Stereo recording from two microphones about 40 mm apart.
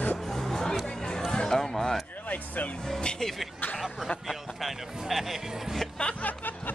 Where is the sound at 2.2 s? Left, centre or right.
Left.